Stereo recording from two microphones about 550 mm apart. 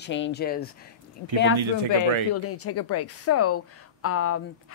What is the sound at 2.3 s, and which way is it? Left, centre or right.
Speech, left.